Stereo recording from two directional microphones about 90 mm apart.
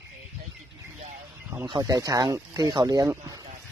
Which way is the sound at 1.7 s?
40° right (ahead or behind).